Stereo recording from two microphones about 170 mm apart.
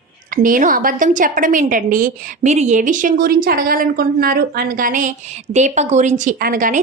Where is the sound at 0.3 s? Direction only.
50° right (ahead or behind).